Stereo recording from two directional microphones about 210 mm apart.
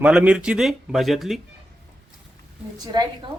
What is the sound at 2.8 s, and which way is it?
Speech, 20° right (ahead or behind).